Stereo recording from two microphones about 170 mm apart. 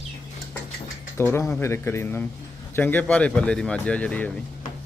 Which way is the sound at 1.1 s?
15° left (ahead or behind).